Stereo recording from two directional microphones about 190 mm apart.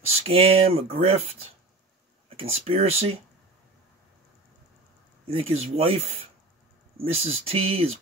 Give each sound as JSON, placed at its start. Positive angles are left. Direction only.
{"t": 0.1, "sound": "speech", "side_deg": -30}
{"t": 5.2, "sound": "speech", "side_deg": -30}